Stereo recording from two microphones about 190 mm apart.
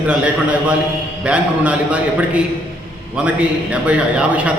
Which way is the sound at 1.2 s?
5° right (ahead or behind).